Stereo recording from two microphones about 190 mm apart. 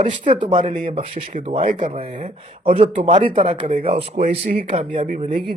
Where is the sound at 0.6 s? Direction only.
40° right (ahead or behind).